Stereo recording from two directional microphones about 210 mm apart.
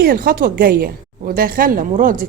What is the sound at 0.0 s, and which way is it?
A woman's voice, 45° right (ahead or behind).